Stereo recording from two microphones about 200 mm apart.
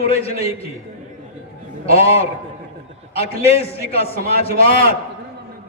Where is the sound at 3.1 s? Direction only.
30° left (ahead or behind).